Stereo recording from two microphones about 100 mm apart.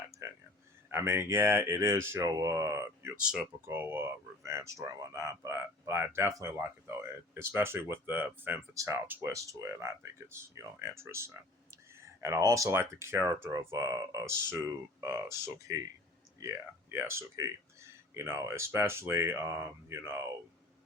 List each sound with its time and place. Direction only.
0.2 s speech: 30° right (ahead or behind)
3.2 s speech: 10° right (ahead or behind)
3.7 s speech: 20° right (ahead or behind)
8.7 s speech: 30° right (ahead or behind)
9.0 s speech: 20° right (ahead or behind)
9.3 s speech: 30° right (ahead or behind)
16.9 s speech: 25° right (ahead or behind)